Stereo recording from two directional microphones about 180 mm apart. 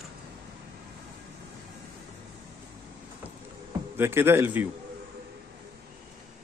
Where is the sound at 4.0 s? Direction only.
15° right (ahead or behind).